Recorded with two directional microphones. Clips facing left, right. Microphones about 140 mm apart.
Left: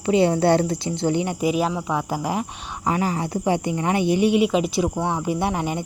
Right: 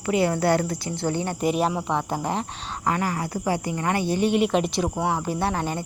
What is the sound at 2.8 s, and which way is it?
Speech, 20° left (ahead or behind).